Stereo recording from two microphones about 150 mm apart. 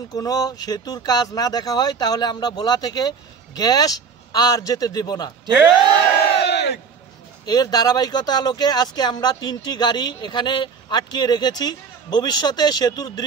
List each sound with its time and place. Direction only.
0.1 s speech: 25° left (ahead or behind)
6.3 s crowd: 90° left
7.4 s speech: 25° left (ahead or behind)